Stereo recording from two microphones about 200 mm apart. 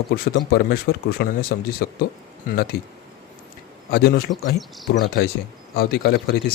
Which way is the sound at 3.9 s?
50° left (ahead or behind).